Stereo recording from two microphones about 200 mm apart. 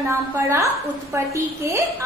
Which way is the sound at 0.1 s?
15° right (ahead or behind).